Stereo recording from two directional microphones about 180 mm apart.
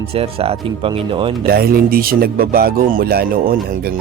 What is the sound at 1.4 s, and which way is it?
Speech, 55° right (ahead or behind).